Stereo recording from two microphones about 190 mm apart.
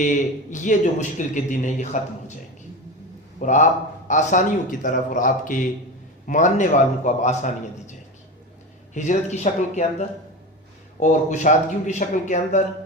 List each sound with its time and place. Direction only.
0.0 s a man's voice: 40° left (ahead or behind)
3.4 s a man's voice: 40° left (ahead or behind)
11.0 s a man's voice: 40° left (ahead or behind)